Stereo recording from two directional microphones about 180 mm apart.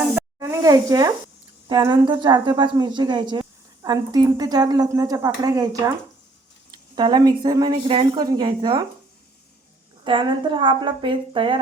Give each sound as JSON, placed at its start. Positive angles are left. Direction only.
{"t": 0.1, "sound": "sizzle", "side_deg": -15}
{"t": 1.6, "sound": "a woman's voice", "side_deg": -25}
{"t": 10.0, "sound": "a woman's voice", "side_deg": -25}